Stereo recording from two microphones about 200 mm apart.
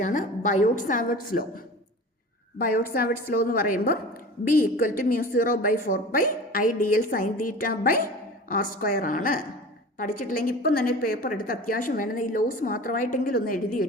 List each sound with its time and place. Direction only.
0.0 s a woman's voice: 40° left (ahead or behind)